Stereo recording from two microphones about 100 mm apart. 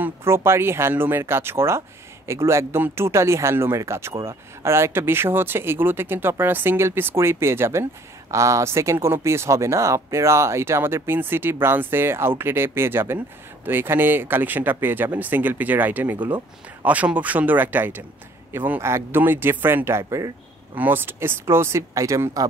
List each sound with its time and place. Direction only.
0.0 s speech: 25° right (ahead or behind)
16.2 s speech: 50° right (ahead or behind)
16.8 s speech: 15° right (ahead or behind); by 20.3 s 35° right (ahead or behind)
20.7 s speech: 20° right (ahead or behind)